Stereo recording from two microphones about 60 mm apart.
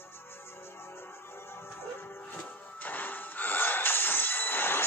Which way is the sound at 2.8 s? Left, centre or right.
Left.